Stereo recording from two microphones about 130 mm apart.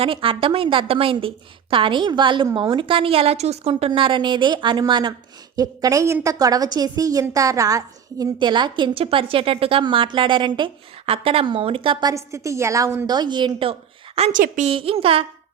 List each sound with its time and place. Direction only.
0.0 s a woman's voice: 45° right (ahead or behind)
12.1 s a woman's voice: 25° right (ahead or behind)
13.1 s a woman's voice: 35° right (ahead or behind)
14.3 s a woman's voice: 90° right
14.7 s a woman's voice: 45° right (ahead or behind)